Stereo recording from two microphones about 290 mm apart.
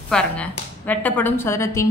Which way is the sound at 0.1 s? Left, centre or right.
Centre.